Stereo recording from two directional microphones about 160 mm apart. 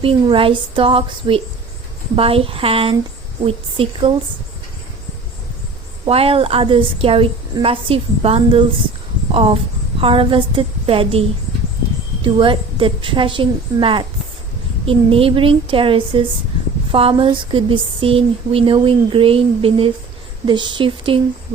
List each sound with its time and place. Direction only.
0.0 s speech: 35° right (ahead or behind)
6.1 s speech: 35° right (ahead or behind)